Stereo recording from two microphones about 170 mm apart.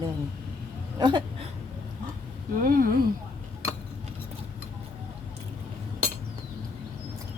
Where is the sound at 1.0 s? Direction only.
25° right (ahead or behind).